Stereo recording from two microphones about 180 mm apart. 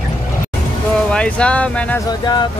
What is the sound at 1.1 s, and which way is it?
Speech, 5° left (ahead or behind).